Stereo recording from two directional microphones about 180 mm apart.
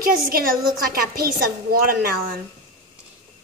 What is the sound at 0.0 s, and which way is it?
A woman's voice, 55° right (ahead or behind).